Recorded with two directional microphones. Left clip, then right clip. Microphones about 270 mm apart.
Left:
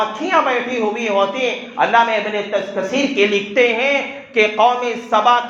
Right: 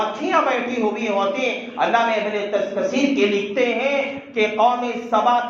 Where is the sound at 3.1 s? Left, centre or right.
Left.